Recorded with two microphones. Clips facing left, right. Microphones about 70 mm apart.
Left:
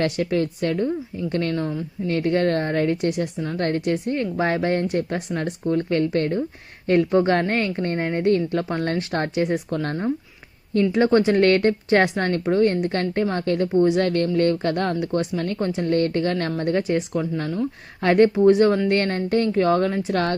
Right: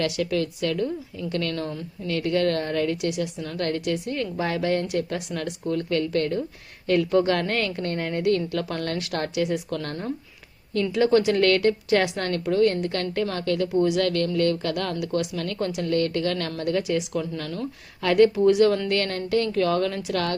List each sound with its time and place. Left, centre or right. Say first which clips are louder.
0.0 s a woman's voice: left 3 dB; left